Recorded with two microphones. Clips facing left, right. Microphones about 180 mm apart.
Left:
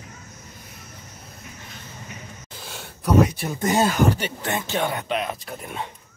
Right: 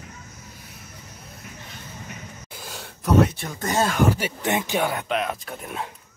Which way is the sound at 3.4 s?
15° left (ahead or behind).